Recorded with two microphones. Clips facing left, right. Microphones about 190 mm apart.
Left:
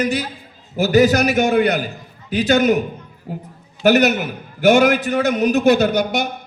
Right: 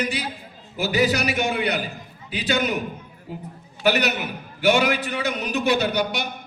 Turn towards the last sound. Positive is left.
turn(degrees=45)  # may be behind; listen again after turning